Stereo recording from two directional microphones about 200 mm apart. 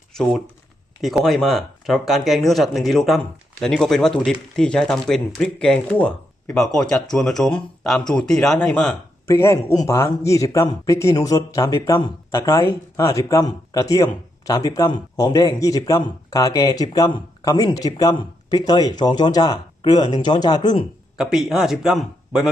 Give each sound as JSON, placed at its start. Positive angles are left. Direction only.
{"t": 0.1, "sound": "speech", "side_deg": 0}
{"t": 21.2, "sound": "speech", "side_deg": -5}